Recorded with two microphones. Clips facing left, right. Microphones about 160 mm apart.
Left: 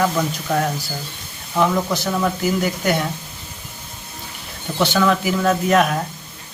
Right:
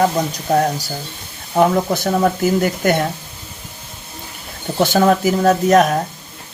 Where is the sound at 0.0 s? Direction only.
35° right (ahead or behind).